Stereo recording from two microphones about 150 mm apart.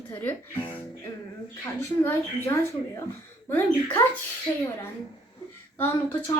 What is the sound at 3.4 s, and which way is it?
Speech, 15° left (ahead or behind).